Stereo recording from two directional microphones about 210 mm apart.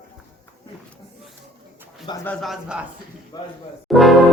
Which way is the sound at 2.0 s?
15° left (ahead or behind).